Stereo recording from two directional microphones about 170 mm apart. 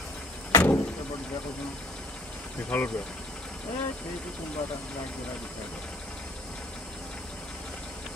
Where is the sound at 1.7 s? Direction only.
5° left (ahead or behind).